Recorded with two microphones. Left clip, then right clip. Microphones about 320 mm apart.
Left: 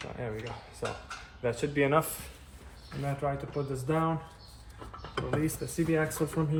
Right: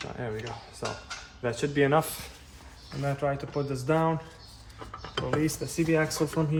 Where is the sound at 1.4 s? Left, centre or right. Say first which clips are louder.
Right 2 dB; right.